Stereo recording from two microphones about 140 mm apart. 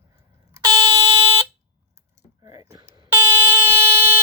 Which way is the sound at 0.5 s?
30° right (ahead or behind).